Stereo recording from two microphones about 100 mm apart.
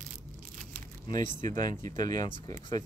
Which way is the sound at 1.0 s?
50° left (ahead or behind).